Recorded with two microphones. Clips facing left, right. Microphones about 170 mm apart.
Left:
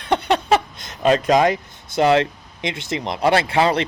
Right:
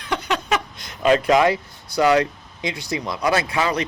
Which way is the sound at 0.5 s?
25° left (ahead or behind).